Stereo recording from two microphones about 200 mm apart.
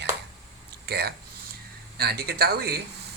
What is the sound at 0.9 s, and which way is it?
Speech, 55° right (ahead or behind).